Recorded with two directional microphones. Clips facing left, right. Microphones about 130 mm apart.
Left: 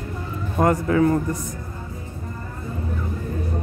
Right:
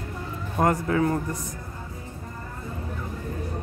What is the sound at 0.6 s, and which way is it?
Speech, 35° right (ahead or behind).